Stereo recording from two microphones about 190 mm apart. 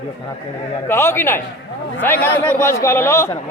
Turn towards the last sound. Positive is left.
turn(degrees=15)  # may be behind; listen again after turning